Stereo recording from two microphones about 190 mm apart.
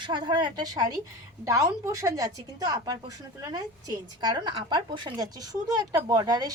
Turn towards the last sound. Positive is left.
turn(degrees=-20)  # may be behind; listen again after turning